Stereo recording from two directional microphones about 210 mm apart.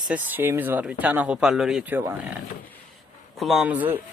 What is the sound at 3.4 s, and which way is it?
Speech, centre (ahead or behind).